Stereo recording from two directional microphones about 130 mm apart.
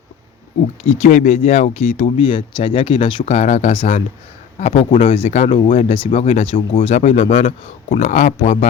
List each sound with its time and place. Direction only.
0.9 s speech: 60° left (ahead or behind)
1.4 s speech: 55° left (ahead or behind)
2.1 s speech: 40° left (ahead or behind)
7.9 s speech: 80° left